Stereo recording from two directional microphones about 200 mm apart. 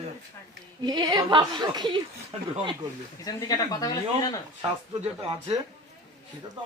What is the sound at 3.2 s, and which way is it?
Speech, 20° left (ahead or behind).